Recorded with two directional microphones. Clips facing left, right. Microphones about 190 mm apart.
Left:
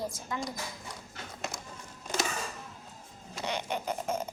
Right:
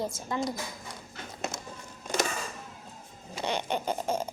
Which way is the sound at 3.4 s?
30° right (ahead or behind).